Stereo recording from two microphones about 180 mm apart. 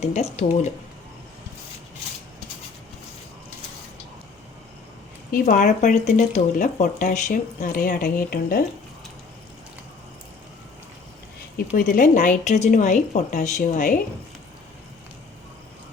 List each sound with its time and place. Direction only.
0.0 s speech: 35° left (ahead or behind)
5.3 s speech: 45° left (ahead or behind)
11.5 s speech: 50° left (ahead or behind)